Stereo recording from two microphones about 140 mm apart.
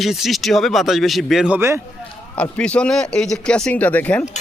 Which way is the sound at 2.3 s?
10° left (ahead or behind).